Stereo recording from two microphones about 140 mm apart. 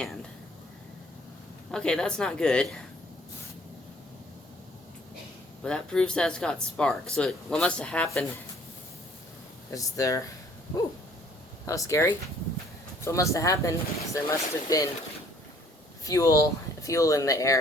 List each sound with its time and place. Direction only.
1.7 s speech: 5° left (ahead or behind)
5.6 s speech: 5° left (ahead or behind)
9.7 s speech: 25° left (ahead or behind)
11.6 s speech: 25° left (ahead or behind)
16.0 s speech: 25° left (ahead or behind)